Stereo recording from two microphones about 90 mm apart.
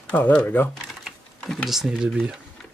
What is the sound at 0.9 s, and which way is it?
Typing, centre (ahead or behind).